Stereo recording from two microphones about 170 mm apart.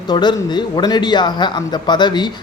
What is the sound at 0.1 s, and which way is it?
Speech, 25° left (ahead or behind).